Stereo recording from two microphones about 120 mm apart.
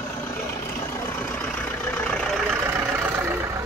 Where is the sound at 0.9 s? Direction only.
20° left (ahead or behind).